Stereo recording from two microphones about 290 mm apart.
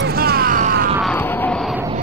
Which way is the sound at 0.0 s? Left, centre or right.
Right.